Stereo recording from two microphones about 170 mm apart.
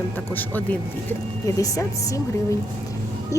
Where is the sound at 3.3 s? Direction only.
20° left (ahead or behind).